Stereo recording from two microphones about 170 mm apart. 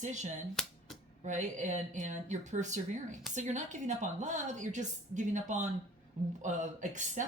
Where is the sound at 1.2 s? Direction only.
45° right (ahead or behind).